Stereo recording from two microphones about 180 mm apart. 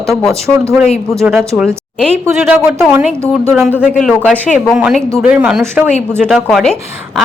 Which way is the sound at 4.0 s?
5° left (ahead or behind).